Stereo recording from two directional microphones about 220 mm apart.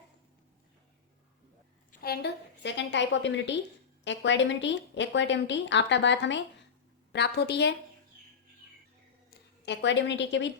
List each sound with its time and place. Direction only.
1.9 s a woman's voice: 45° left (ahead or behind)
9.6 s a woman's voice: 55° left (ahead or behind)